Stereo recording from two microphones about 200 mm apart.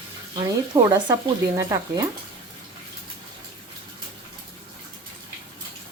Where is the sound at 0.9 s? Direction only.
20° right (ahead or behind).